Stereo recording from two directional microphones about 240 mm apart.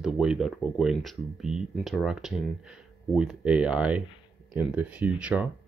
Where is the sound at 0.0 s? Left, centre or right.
Centre.